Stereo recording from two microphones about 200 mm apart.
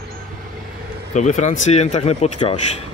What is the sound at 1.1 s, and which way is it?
Speech, 35° left (ahead or behind).